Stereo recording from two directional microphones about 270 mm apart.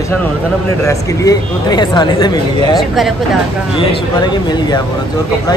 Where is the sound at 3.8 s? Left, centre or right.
Centre.